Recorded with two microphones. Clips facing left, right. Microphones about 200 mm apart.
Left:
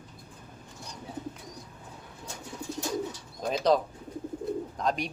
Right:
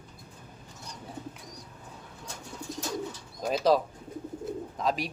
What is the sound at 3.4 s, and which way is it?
Speech, 5° right (ahead or behind).